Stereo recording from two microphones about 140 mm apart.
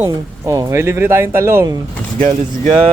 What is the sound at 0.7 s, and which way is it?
Speech, 15° right (ahead or behind).